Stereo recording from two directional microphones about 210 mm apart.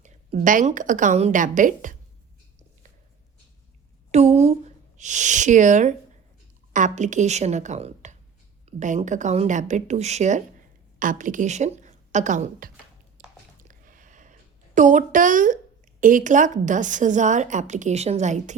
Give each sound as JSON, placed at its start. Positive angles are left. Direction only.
{"t": 0.3, "sound": "a woman's voice", "side_deg": -40}
{"t": 4.1, "sound": "a woman's voice", "side_deg": -30}
{"t": 11.8, "sound": "a sound", "side_deg": -35}
{"t": 14.8, "sound": "a woman's voice", "side_deg": -35}